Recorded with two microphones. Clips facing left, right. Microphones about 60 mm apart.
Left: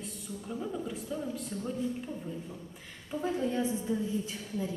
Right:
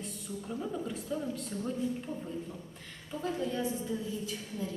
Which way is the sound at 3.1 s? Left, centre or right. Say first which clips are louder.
Left 3 dB; centre.